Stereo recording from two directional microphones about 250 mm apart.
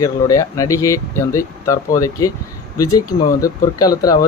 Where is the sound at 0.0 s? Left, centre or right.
Centre.